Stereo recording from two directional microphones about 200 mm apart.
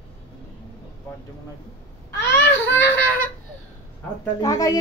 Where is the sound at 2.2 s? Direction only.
15° left (ahead or behind).